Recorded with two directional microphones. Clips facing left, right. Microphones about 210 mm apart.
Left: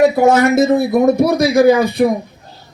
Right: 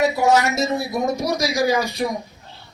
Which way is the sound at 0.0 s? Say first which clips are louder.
Left 7 dB; 55° left (ahead or behind).